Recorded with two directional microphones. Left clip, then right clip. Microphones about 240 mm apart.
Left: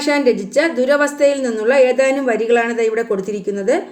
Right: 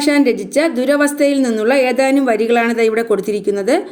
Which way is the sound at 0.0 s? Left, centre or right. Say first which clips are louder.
Right 1 dB; right.